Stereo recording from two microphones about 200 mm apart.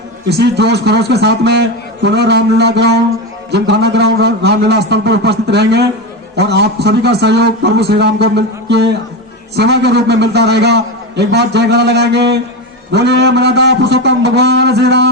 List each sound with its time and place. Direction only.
0.3 s a man's voice: 55° right (ahead or behind)